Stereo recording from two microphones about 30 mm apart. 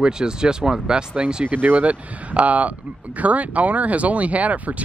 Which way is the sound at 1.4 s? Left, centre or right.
Right.